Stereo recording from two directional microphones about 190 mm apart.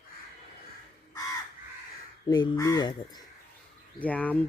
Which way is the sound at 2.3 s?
20° left (ahead or behind).